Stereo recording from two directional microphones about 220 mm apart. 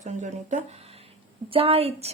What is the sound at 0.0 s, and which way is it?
A woman's voice, 35° right (ahead or behind).